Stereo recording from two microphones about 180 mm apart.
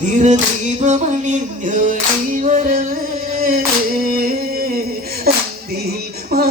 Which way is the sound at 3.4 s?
55° right (ahead or behind).